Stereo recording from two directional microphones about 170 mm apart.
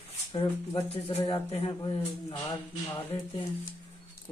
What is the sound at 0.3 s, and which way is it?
Speech, 35° left (ahead or behind).